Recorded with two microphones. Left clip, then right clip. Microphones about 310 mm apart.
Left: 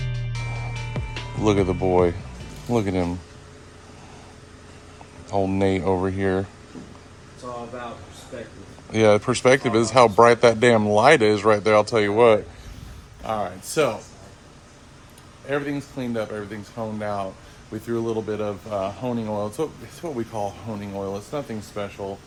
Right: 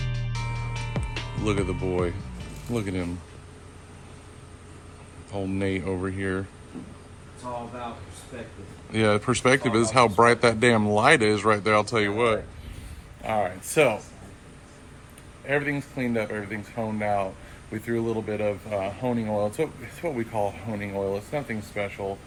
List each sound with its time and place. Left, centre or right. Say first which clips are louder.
0.0 s music: left 1 dB; centre
1.5 s speech: left 8 dB; centre
5.3 s speech: left 7 dB; centre
8.9 s speech: left 5 dB; centre
15.4 s speech: even; centre